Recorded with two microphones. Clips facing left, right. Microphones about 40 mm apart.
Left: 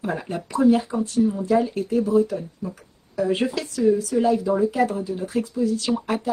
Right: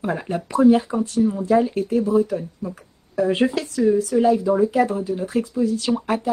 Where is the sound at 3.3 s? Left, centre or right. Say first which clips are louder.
Right 3 dB; right.